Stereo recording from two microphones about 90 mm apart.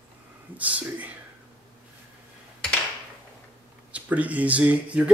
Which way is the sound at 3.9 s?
15° right (ahead or behind).